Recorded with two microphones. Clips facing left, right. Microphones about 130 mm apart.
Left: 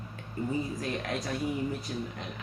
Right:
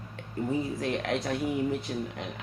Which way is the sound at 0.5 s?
80° right.